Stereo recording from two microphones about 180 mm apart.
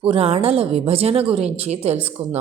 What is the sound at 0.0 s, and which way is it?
A woman's voice, 30° right (ahead or behind).